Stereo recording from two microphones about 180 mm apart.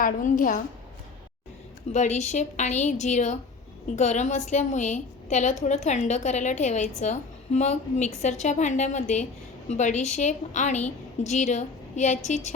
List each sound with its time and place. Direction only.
0.0 s a woman's voice: 50° left (ahead or behind)
1.9 s a woman's voice: 40° left (ahead or behind)